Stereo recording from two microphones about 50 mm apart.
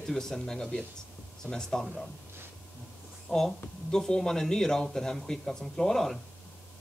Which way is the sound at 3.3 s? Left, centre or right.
Left.